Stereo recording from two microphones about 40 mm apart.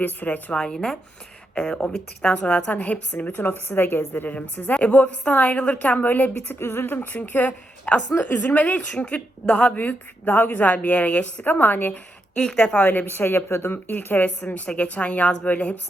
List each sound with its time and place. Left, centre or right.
0.0 s a woman's voice: left
0.5 s a woman's voice: left
3.3 s a woman's voice: left
4.7 s a woman's voice: left
7.0 s a woman's voice: left
11.4 s a woman's voice: left
12.5 s a woman's voice: left
12.8 s a woman's voice: left
13.1 s a woman's voice: left